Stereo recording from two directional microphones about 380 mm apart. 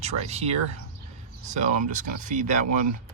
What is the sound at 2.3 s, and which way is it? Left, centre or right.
Speech, centre.